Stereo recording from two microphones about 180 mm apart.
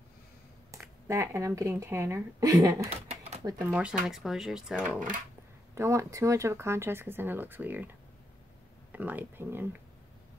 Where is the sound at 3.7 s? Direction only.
5° right (ahead or behind).